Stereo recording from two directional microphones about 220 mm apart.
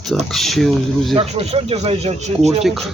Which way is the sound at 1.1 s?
30° right (ahead or behind).